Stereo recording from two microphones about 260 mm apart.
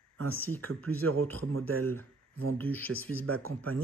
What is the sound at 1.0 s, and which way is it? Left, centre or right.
Speech, right.